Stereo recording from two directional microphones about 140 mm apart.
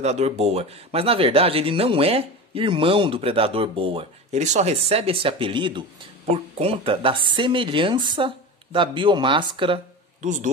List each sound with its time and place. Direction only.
0.0 s speech: 50° right (ahead or behind); by 9.8 s 35° right (ahead or behind)
10.2 s speech: 60° right (ahead or behind)